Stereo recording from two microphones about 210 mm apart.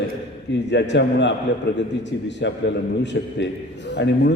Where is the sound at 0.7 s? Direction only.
55° left (ahead or behind).